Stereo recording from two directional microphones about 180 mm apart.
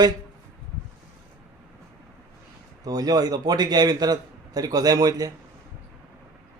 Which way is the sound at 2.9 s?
20° right (ahead or behind).